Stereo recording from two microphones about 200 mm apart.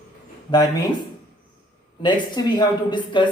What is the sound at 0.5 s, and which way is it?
Speech, 20° left (ahead or behind).